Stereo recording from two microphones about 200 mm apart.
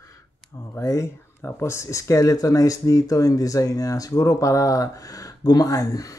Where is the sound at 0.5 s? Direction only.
15° left (ahead or behind).